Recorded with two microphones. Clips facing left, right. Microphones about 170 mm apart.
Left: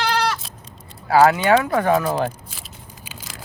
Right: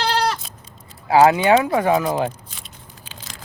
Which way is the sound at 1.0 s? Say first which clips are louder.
Right 1 dB; 15° right (ahead or behind).